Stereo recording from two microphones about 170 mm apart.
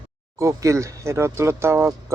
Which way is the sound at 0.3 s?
20° right (ahead or behind).